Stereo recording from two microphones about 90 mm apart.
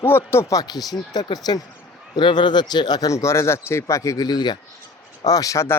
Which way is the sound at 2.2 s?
60° left (ahead or behind).